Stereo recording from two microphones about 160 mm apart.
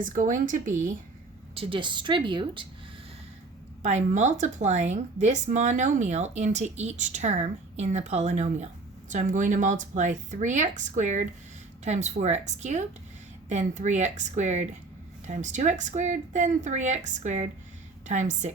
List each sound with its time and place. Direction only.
0.0 s speech: 55° right (ahead or behind)
1.5 s a woman's voice: 30° right (ahead or behind)
3.8 s speech: 45° right (ahead or behind)